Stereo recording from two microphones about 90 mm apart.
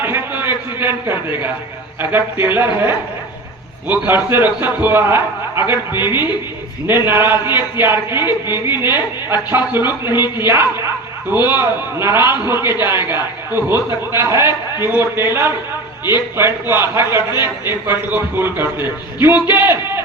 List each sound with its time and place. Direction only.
0.0 s a sound: 25° right (ahead or behind)
2.0 s a man's voice: 25° right (ahead or behind)
16.4 s a man's voice: 30° right (ahead or behind)